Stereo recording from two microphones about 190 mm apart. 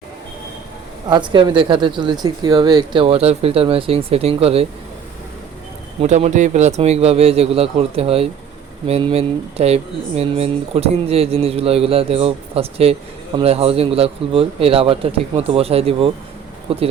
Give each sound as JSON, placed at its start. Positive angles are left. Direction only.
{"t": 1.1, "sound": "speech", "side_deg": -25}
{"t": 6.0, "sound": "speech", "side_deg": -35}